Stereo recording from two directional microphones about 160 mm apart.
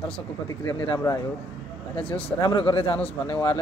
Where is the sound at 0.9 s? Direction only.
20° left (ahead or behind).